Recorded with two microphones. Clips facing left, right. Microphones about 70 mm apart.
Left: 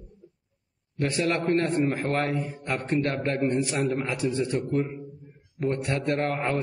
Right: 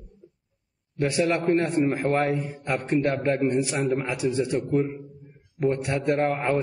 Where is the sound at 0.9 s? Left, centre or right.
Centre.